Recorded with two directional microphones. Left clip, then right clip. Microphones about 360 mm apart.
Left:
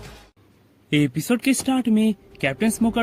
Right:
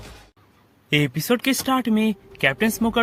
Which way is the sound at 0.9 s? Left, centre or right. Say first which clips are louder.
Right 1 dB; centre.